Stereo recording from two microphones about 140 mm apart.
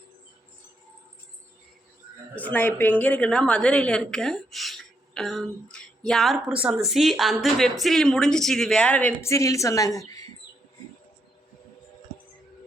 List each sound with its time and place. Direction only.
2.3 s a woman's voice: 10° left (ahead or behind)
9.2 s a woman's voice: 20° left (ahead or behind)